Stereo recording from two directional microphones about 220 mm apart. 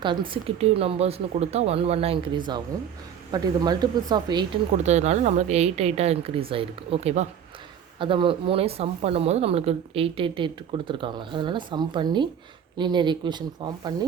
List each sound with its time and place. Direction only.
0.0 s speech: 20° right (ahead or behind)
4.8 s speech: 30° right (ahead or behind)